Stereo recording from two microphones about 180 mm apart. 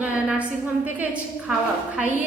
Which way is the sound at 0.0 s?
5° right (ahead or behind).